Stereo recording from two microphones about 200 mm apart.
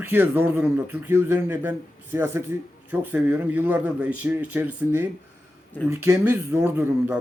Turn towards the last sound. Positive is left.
turn(degrees=-10)  # may be behind; listen again after turning